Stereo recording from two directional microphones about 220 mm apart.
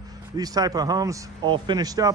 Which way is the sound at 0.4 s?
15° right (ahead or behind).